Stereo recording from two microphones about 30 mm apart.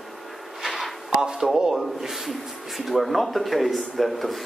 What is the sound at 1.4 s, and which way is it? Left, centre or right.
Speech, centre.